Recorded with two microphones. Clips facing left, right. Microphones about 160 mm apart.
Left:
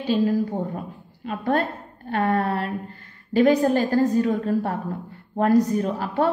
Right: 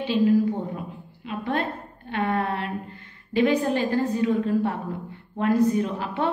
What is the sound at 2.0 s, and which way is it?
A woman's voice, 40° left (ahead or behind).